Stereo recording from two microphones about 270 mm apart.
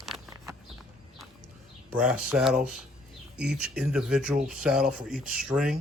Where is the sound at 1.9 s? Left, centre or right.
Centre.